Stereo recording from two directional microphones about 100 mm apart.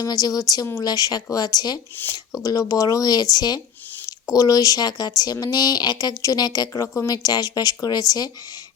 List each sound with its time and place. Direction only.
0.0 s speech: 40° left (ahead or behind)